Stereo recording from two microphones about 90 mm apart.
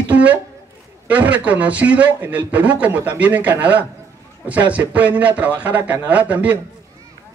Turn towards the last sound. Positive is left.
turn(degrees=-15)  # may be behind; listen again after turning